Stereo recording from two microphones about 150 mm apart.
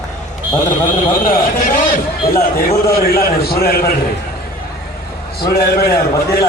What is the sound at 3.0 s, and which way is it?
Speech, 90° left.